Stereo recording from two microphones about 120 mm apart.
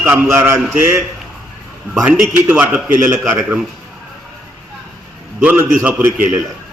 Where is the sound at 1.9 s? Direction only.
10° right (ahead or behind).